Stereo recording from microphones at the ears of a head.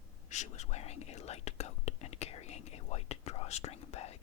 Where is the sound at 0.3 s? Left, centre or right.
Left.